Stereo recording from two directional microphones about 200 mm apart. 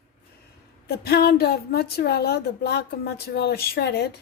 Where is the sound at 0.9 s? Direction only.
50° left (ahead or behind).